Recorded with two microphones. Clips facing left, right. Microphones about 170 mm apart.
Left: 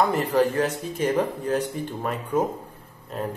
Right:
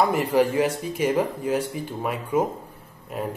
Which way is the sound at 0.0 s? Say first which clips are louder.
Right 1 dB; 10° right (ahead or behind).